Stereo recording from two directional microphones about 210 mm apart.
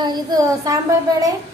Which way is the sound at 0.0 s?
20° right (ahead or behind).